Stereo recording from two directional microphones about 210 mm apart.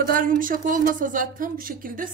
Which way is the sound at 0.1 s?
40° right (ahead or behind).